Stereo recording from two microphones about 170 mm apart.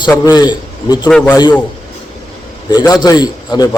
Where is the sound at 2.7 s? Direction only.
20° left (ahead or behind).